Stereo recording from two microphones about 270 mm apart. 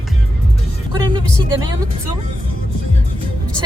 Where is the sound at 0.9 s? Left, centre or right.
Centre.